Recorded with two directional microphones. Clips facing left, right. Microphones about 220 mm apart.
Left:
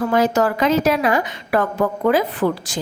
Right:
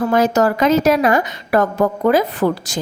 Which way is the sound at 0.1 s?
45° right (ahead or behind).